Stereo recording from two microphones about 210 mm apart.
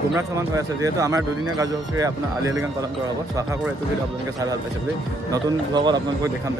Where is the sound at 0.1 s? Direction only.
15° right (ahead or behind).